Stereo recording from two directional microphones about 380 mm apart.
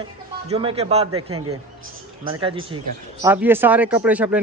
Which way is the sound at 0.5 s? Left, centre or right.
Centre.